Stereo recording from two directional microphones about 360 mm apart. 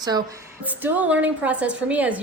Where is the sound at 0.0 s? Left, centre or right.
Centre.